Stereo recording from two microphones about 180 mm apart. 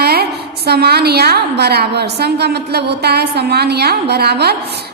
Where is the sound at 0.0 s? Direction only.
60° right (ahead or behind).